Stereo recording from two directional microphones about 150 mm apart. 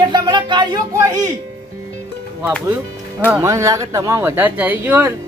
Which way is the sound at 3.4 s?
20° right (ahead or behind).